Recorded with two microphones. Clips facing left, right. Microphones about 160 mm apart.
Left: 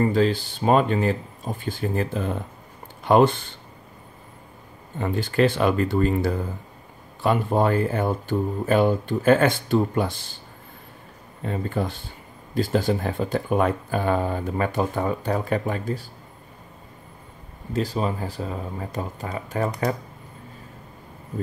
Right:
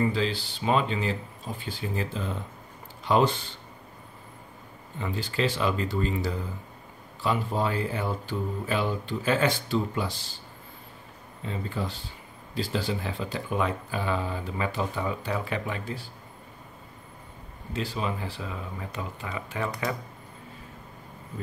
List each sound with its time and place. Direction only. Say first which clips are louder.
0.0 s speech: left 6 dB; 50° left (ahead or behind)
4.9 s speech: left 8 dB; 55° left (ahead or behind)
11.4 s speech: left 6 dB; 55° left (ahead or behind)
17.7 s speech: left 6 dB; 40° left (ahead or behind)